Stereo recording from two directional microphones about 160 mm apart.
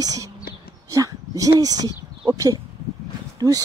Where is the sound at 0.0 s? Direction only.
20° right (ahead or behind).